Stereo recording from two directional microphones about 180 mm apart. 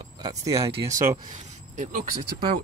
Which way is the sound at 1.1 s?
40° right (ahead or behind).